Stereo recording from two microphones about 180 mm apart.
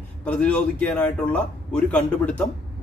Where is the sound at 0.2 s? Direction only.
5° left (ahead or behind).